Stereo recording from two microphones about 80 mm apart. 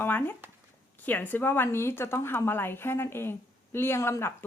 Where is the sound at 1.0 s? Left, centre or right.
Left.